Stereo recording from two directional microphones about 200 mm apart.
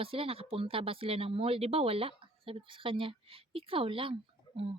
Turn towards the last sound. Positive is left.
turn(degrees=-25)  # may be behind; listen again after turning